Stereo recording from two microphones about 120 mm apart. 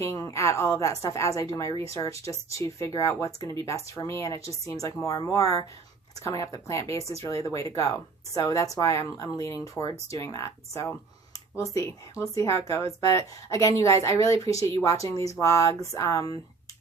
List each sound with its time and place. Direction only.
0.0 s a woman's voice: 25° left (ahead or behind)